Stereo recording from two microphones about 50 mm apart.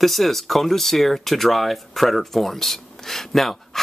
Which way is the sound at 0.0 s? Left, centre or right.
Centre.